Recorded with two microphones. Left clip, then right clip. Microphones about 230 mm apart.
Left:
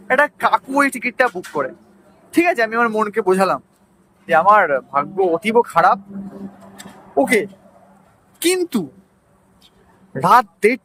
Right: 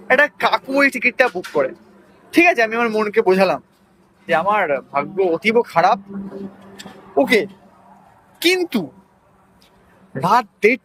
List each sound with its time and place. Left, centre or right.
0.1 s speech: centre
2.3 s speech: centre
7.2 s a man's voice: centre
10.2 s a man's voice: left